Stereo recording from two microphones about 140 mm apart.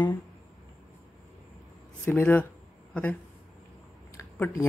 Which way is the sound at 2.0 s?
15° left (ahead or behind).